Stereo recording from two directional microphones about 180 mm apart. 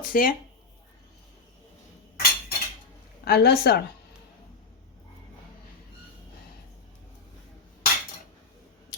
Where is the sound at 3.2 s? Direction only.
60° left (ahead or behind).